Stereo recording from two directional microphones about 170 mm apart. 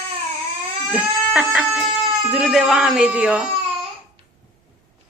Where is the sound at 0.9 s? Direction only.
5° right (ahead or behind).